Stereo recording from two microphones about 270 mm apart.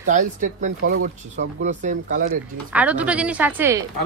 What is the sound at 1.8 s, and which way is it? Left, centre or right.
Speech, right.